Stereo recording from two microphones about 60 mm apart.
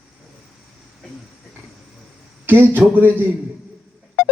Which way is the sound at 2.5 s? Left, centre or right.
Right.